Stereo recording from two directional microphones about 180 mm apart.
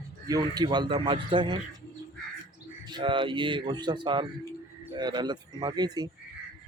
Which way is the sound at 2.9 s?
25° right (ahead or behind).